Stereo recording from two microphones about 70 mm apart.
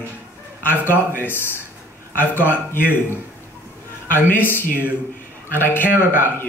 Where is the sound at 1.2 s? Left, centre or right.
Left.